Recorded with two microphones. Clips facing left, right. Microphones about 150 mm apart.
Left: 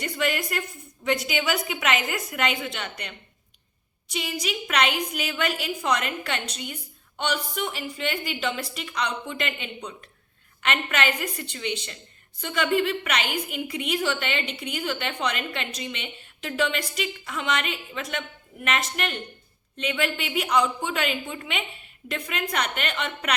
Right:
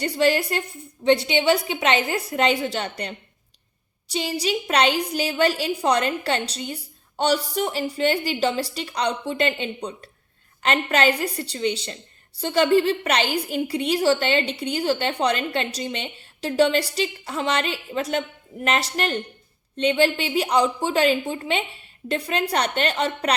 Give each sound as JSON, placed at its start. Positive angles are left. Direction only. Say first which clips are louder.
{"t": 0.0, "sound": "a woman's voice", "louder": "right 7 dB", "side_deg": -30}